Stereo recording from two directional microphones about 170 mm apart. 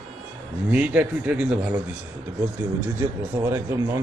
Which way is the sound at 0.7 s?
10° right (ahead or behind).